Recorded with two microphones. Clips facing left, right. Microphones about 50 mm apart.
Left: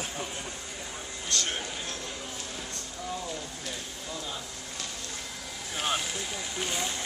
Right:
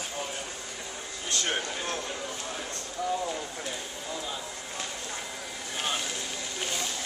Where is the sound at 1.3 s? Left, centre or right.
Right.